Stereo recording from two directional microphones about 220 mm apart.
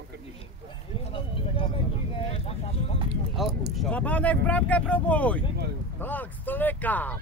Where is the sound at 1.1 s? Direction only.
25° left (ahead or behind).